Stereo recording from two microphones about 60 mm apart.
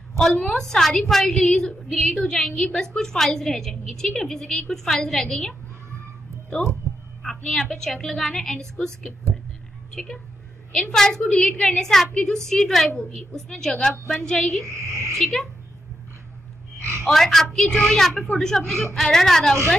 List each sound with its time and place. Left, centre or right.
0.2 s a woman's voice: centre
7.2 s a woman's voice: centre
9.9 s a woman's voice: centre
14.7 s speech: right
15.1 s a woman's voice: centre
17.0 s a woman's voice: centre